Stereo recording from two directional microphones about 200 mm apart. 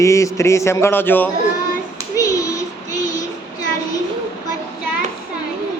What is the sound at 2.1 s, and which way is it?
Child singing, 15° left (ahead or behind).